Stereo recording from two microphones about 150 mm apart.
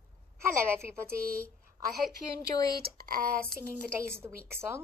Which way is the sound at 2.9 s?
85° right.